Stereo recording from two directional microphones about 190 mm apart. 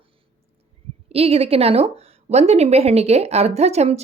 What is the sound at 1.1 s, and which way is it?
Speech, 30° right (ahead or behind).